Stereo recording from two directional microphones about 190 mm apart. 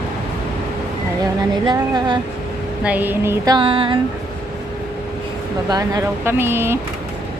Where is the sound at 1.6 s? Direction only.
25° right (ahead or behind).